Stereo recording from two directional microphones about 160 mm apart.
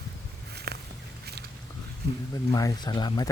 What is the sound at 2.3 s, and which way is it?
Speech, 20° left (ahead or behind).